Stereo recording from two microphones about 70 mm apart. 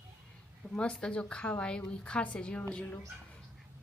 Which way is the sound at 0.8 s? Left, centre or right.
Centre.